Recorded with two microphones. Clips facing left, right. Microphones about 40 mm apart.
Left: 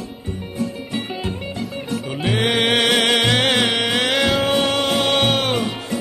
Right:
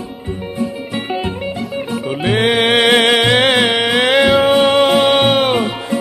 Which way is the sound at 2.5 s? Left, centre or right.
Centre.